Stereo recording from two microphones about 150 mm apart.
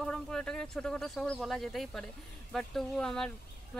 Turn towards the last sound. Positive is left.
turn(degrees=5)  # may be behind; listen again after turning